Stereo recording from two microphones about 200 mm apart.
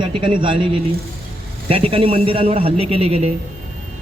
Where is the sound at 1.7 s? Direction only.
30° right (ahead or behind).